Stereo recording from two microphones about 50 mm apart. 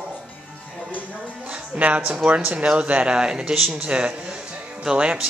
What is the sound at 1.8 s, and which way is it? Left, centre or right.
Speech, right.